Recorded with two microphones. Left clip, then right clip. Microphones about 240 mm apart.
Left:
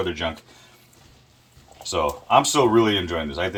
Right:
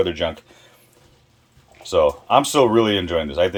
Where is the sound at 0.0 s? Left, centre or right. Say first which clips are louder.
Right 5 dB; right.